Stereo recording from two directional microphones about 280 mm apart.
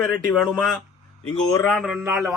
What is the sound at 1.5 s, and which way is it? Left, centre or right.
Speech, centre.